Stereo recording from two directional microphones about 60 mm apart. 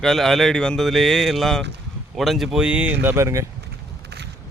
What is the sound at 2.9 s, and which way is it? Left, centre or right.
Speech, right.